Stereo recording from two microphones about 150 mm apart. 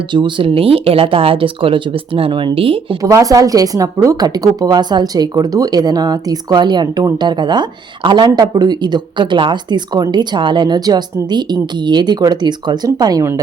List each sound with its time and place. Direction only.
0.1 s speech: 30° right (ahead or behind)
3.0 s a woman's voice: 20° right (ahead or behind)